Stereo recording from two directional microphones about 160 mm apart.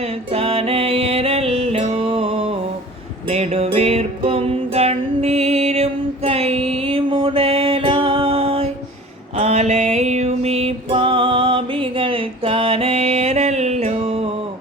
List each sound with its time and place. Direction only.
0.0 s music: 40° right (ahead or behind)